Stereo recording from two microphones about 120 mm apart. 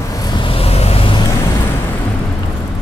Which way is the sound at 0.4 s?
50° left (ahead or behind).